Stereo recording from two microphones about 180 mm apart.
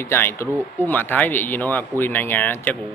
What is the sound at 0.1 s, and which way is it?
Speech, 10° left (ahead or behind).